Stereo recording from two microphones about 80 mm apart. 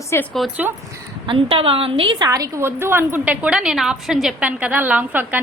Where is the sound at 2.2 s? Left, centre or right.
Right.